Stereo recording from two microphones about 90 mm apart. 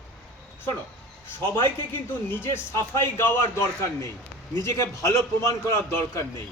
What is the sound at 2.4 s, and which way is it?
A man's voice, 30° left (ahead or behind).